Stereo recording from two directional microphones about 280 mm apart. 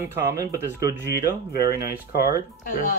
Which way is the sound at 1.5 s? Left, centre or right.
Left.